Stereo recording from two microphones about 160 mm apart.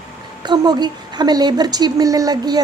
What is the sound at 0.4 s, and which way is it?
A woman's voice, 25° right (ahead or behind).